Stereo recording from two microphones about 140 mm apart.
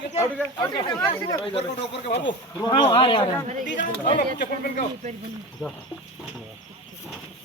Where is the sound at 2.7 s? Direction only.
35° left (ahead or behind).